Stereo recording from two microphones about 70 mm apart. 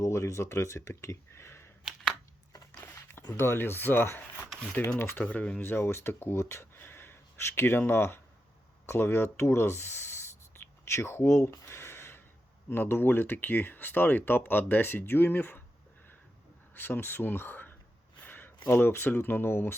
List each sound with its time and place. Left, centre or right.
0.0 s speech: left
3.3 s speech: left
5.2 s speech: left
10.8 s a sound: left
12.7 s speech: left
16.7 s speech: left
18.2 s a sound: left
18.6 s speech: left